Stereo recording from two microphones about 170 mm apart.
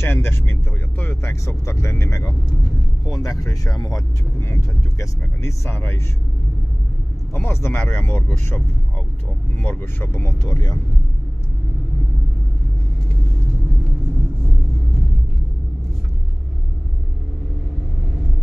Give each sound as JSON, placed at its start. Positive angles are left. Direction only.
{"t": 0.0, "sound": "speech", "side_deg": 15}
{"t": 7.3, "sound": "speech", "side_deg": 15}